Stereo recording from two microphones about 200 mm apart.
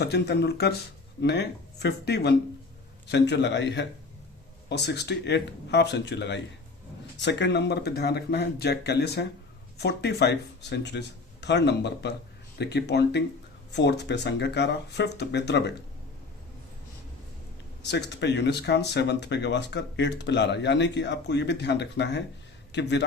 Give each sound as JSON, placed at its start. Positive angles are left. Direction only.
{"t": 0.0, "sound": "speech", "side_deg": 55}
{"t": 17.8, "sound": "speech", "side_deg": 60}